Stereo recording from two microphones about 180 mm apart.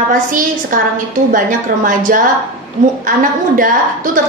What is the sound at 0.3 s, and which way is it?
Speech, 50° right (ahead or behind).